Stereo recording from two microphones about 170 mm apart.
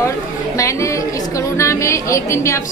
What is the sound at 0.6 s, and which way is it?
A woman's voice, 20° left (ahead or behind).